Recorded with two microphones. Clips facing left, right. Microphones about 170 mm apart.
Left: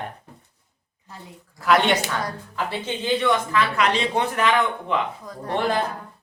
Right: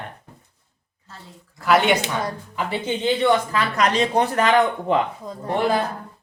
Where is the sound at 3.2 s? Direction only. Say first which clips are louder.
Right 2 dB; 40° right (ahead or behind).